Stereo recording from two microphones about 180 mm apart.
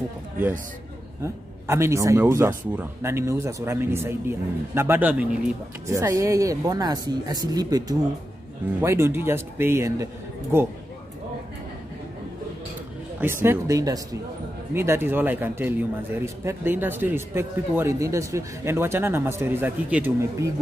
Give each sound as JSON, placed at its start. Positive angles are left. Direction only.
{"t": 1.2, "sound": "a man's voice", "side_deg": -15}
{"t": 8.8, "sound": "a man's voice", "side_deg": -15}
{"t": 13.2, "sound": "a man's voice", "side_deg": -10}